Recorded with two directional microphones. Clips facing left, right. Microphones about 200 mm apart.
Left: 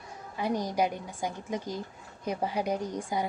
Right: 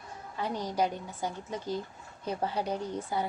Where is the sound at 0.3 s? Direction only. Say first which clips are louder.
Left 2 dB; 15° left (ahead or behind).